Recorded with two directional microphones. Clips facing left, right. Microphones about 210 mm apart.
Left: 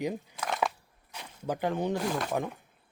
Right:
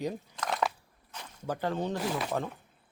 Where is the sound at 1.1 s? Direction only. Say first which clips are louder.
Left 2 dB; 15° left (ahead or behind).